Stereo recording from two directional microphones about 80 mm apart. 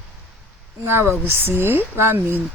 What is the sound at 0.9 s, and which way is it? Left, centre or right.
Speech, right.